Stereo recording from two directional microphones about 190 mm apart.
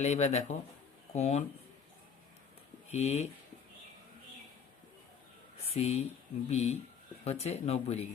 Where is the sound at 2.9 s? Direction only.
35° left (ahead or behind).